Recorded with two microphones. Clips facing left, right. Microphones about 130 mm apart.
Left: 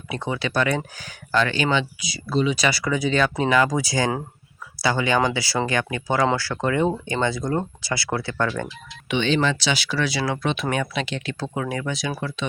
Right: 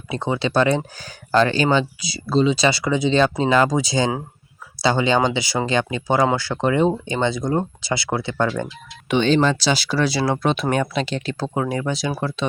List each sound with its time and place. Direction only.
0.1 s speech: 30° right (ahead or behind)
9.0 s speech: 40° right (ahead or behind)